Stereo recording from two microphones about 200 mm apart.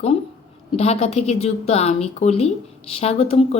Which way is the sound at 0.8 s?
30° left (ahead or behind).